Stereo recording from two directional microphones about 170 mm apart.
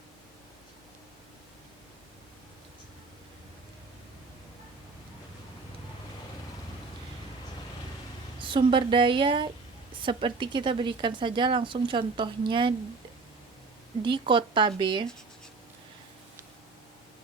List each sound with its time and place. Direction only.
8.4 s speech: 30° right (ahead or behind)
14.0 s speech: 30° right (ahead or behind)